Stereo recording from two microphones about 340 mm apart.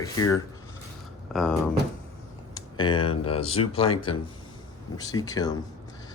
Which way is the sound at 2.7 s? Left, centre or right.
Centre.